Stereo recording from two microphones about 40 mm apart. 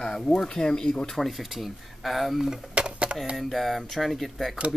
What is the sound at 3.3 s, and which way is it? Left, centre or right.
Speech, centre.